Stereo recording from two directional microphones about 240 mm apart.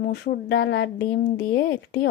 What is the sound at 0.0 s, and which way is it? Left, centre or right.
A woman's voice, left.